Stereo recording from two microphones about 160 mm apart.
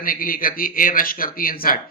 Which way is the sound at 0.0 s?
60° left (ahead or behind).